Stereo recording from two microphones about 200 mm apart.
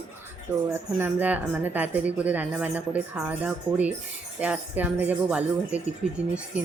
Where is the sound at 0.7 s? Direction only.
10° right (ahead or behind).